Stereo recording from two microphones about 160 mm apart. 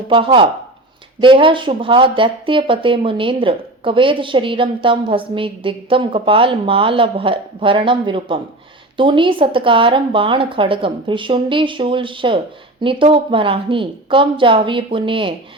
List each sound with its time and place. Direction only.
0.1 s speech: 30° right (ahead or behind)